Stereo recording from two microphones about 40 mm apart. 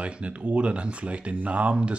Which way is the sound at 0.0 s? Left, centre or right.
Right.